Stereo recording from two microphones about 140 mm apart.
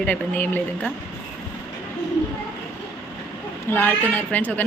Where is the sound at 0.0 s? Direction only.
10° left (ahead or behind).